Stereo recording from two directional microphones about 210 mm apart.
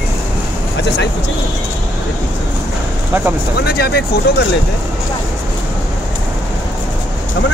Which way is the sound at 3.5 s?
50° left (ahead or behind).